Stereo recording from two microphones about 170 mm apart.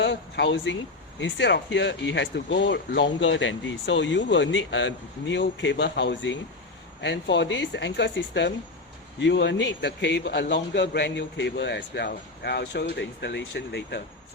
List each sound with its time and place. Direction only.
0.0 s speech: 90° left